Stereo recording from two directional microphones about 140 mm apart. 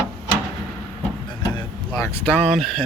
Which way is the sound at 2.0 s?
15° left (ahead or behind).